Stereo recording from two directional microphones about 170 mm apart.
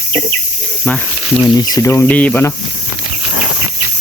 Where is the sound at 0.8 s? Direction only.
5° left (ahead or behind).